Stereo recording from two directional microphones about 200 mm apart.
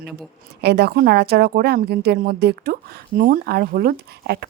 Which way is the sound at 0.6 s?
55° right (ahead or behind).